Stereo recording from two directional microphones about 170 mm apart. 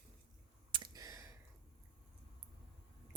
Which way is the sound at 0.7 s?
25° right (ahead or behind).